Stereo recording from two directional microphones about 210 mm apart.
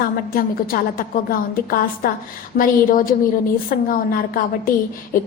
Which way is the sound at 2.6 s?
40° left (ahead or behind).